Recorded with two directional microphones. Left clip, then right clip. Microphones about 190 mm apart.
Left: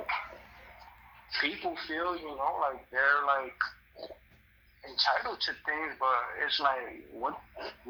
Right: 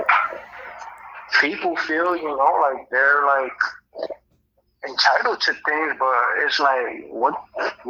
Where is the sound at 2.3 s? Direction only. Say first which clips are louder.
Right 15 dB; 20° right (ahead or behind).